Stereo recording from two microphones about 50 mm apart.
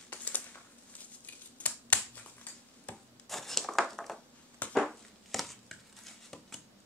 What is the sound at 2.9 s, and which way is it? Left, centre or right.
Rub, left.